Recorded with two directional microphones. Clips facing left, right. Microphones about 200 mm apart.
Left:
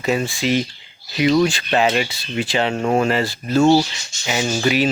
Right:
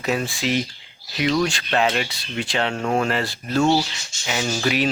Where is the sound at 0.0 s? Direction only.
Centre (ahead or behind).